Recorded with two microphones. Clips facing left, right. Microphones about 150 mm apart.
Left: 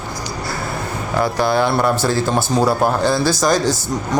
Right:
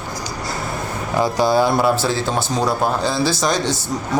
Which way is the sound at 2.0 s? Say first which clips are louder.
Left 2 dB; centre (ahead or behind).